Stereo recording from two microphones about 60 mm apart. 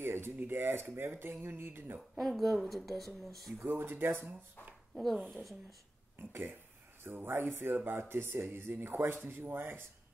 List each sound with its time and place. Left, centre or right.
0.0 s a sound: right
0.4 s speech: right
2.1 s speech: centre
3.6 s speech: right
4.9 s speech: centre
6.1 s speech: right